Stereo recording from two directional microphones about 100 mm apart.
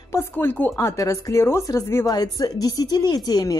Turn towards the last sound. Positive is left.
turn(degrees=45)  # may be behind; listen again after turning